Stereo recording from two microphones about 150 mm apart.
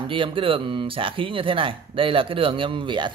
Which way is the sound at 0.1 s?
35° right (ahead or behind).